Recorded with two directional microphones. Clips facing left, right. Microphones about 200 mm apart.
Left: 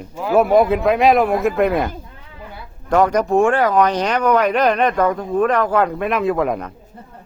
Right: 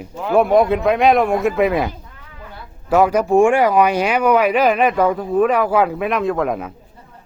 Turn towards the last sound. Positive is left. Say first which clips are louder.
# left 1 dB
turn(degrees=0)  # may be behind; listen again after turning